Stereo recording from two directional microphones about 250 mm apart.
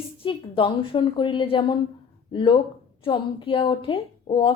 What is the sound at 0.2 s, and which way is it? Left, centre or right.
A woman's voice, left.